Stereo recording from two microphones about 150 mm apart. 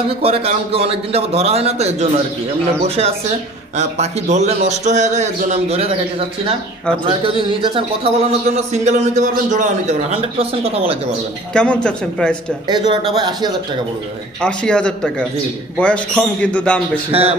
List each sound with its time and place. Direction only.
0.2 s a man's voice: 40° right (ahead or behind)
3.7 s a man's voice: 50° right (ahead or behind)
7.1 s a man's voice: 35° right (ahead or behind); by 9.9 s 55° right (ahead or behind)
11.5 s speech: 5° left (ahead or behind)
12.9 s speech: 30° right (ahead or behind)
14.4 s speech: 5° left (ahead or behind)
17.1 s a man's voice: 40° right (ahead or behind)